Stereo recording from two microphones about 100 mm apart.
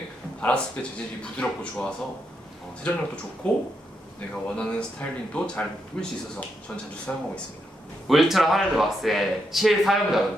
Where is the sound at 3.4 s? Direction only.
10° left (ahead or behind).